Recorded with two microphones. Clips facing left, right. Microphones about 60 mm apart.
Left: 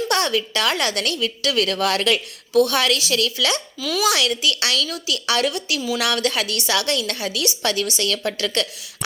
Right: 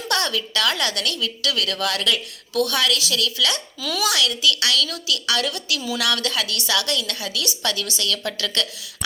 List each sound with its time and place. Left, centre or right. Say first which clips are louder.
0.1 s a woman's voice: right 1 dB; left